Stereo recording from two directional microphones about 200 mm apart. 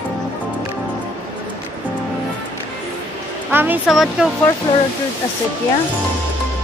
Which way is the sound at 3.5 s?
10° right (ahead or behind).